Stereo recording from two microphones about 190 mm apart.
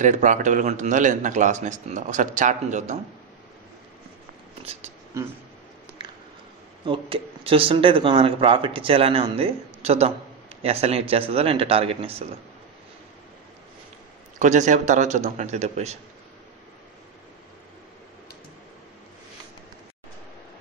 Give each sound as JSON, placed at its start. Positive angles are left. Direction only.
{"t": 0.0, "sound": "speech", "side_deg": -40}
{"t": 5.1, "sound": "speech", "side_deg": -15}
{"t": 6.9, "sound": "speech", "side_deg": -30}
{"t": 14.4, "sound": "speech", "side_deg": -40}